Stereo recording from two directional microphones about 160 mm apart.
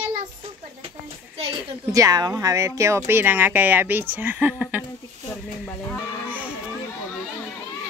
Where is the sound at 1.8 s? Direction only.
20° right (ahead or behind).